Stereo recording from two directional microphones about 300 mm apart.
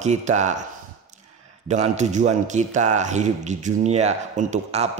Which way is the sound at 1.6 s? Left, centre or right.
Right.